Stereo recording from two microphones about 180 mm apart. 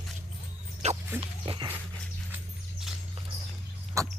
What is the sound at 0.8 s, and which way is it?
Music, 40° right (ahead or behind).